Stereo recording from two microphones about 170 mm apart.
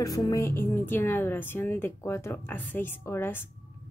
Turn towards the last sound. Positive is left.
turn(degrees=15)  # may be behind; listen again after turning